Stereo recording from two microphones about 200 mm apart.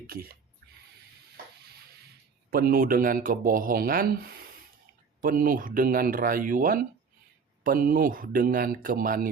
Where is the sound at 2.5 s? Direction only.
45° right (ahead or behind).